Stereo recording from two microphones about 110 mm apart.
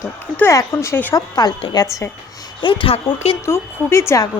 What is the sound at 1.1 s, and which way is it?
Speech, 35° left (ahead or behind).